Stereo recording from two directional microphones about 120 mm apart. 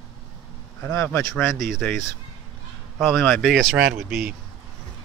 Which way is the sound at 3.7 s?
10° right (ahead or behind).